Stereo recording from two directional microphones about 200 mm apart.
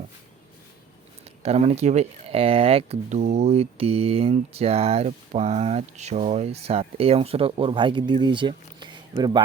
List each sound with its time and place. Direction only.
1.2 s speech: 30° right (ahead or behind)